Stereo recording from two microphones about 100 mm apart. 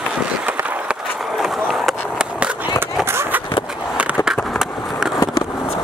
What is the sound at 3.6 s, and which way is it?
Skateboard, 5° right (ahead or behind).